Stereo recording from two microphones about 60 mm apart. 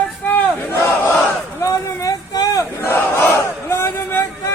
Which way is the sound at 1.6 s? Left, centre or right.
Left.